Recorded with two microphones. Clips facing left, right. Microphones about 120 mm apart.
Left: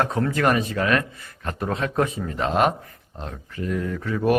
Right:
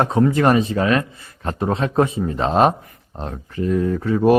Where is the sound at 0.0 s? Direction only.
20° right (ahead or behind).